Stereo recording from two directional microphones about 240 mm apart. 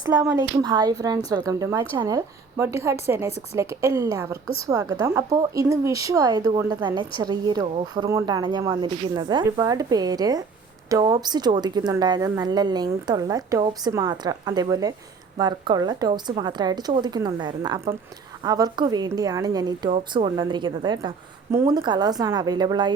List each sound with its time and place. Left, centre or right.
0.0 s a woman's voice: centre